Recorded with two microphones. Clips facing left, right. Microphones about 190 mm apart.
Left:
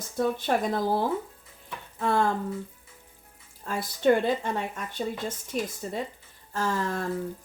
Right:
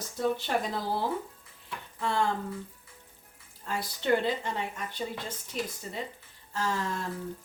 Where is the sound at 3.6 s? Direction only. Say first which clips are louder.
Left 8 dB; 50° left (ahead or behind).